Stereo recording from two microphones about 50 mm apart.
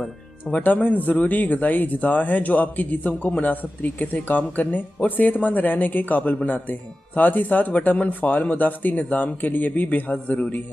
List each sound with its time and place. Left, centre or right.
0.5 s speech: left